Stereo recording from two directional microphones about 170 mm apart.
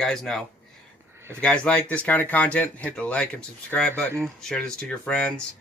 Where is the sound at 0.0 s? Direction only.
5° left (ahead or behind).